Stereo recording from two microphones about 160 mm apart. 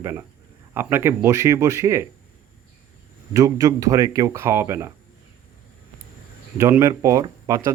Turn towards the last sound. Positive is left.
turn(degrees=-20)  # may be behind; listen again after turning